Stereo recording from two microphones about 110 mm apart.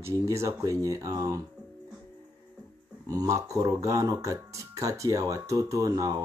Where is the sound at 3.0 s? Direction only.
30° right (ahead or behind).